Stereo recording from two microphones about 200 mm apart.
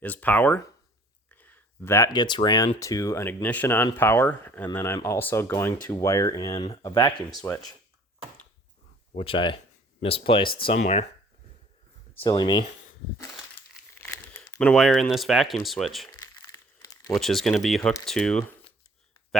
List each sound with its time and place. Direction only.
0.0 s speech: 10° left (ahead or behind)
6.6 s speech: 30° left (ahead or behind)
9.1 s speech: 25° left (ahead or behind)
12.2 s speech: 20° left (ahead or behind)
14.0 s speech: 10° left (ahead or behind)
16.8 s crumpling: 20° left (ahead or behind)
17.2 s speech: centre (ahead or behind)